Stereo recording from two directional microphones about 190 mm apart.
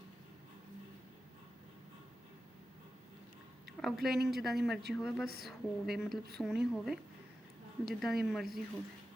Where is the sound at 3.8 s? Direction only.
Centre (ahead or behind).